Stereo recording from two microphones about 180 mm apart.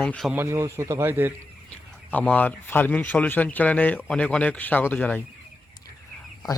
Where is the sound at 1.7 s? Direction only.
10° left (ahead or behind).